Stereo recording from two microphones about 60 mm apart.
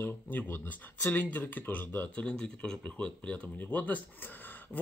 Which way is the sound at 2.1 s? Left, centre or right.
Centre.